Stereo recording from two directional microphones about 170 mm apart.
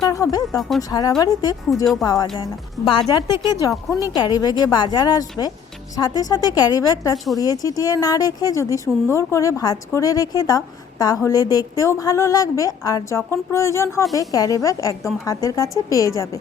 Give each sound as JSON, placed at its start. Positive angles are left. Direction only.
{"t": 0.1, "sound": "speech", "side_deg": 20}